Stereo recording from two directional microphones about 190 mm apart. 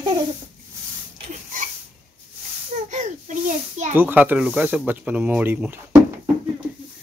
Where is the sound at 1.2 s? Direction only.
35° right (ahead or behind).